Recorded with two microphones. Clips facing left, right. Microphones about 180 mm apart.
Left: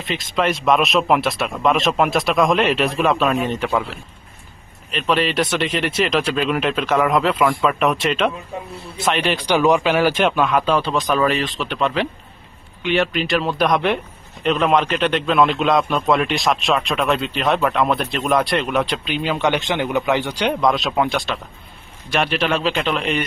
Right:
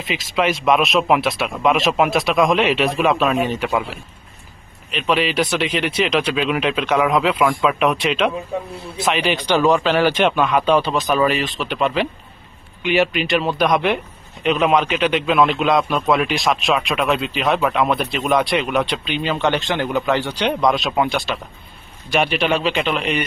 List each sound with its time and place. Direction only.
0.0 s a man's voice: centre (ahead or behind)
4.9 s a man's voice: centre (ahead or behind)
9.5 s a man's voice: 10° left (ahead or behind)
19.3 s a man's voice: 15° left (ahead or behind); by 23.2 s centre (ahead or behind)